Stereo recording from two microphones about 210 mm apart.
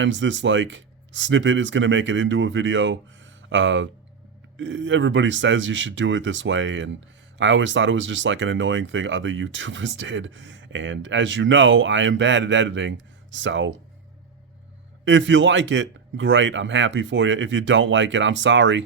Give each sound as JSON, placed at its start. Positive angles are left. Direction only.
{"t": 0.0, "sound": "speech", "side_deg": -60}
{"t": 15.0, "sound": "speech", "side_deg": -60}